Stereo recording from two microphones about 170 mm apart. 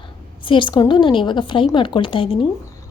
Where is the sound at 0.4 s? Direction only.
30° left (ahead or behind).